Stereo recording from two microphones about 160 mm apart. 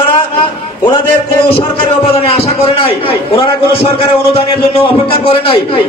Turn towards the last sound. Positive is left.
turn(degrees=35)  # may be behind; listen again after turning